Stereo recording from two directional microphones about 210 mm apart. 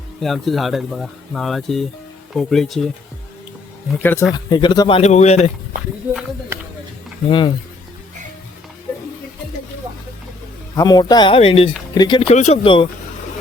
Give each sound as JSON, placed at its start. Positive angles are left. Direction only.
{"t": 0.2, "sound": "speech", "side_deg": 0}
{"t": 4.0, "sound": "speech", "side_deg": 10}
{"t": 7.3, "sound": "speech", "side_deg": 25}
{"t": 10.8, "sound": "speech", "side_deg": 20}
{"t": 12.3, "sound": "speech", "side_deg": 30}